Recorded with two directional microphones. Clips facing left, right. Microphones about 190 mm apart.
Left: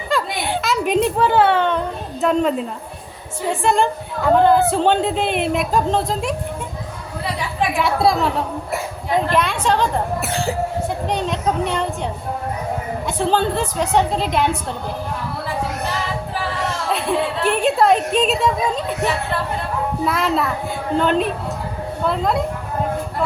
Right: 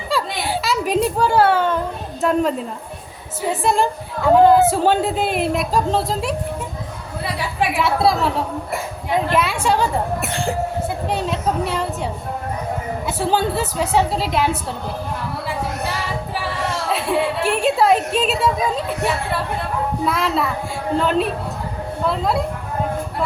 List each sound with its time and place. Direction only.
0.1 s a sound: 5° right (ahead or behind)
2.2 s a woman's voice: centre (ahead or behind)
7.8 s a woman's voice: centre (ahead or behind)
10.2 s a woman's voice: centre (ahead or behind)
16.9 s a woman's voice: centre (ahead or behind)
20.1 s a woman's voice: centre (ahead or behind)